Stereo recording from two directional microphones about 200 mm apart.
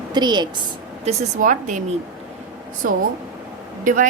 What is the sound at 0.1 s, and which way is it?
Speech, 20° right (ahead or behind).